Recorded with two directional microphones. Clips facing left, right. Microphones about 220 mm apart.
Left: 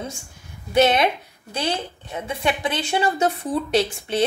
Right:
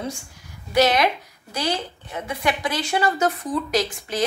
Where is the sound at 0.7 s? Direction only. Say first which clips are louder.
Left 1 dB; 25° left (ahead or behind).